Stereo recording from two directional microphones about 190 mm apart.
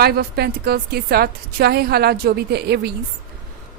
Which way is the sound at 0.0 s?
55° right (ahead or behind).